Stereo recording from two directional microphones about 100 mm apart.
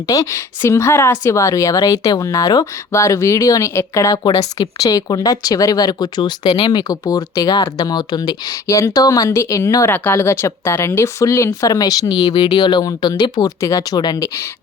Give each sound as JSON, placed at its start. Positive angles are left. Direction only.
{"t": 0.1, "sound": "speech", "side_deg": 35}
{"t": 8.6, "sound": "speech", "side_deg": 30}